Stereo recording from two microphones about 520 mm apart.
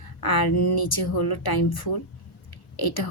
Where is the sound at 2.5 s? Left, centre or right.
Left.